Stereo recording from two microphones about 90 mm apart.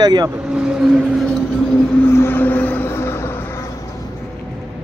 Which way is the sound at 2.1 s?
25° left (ahead or behind).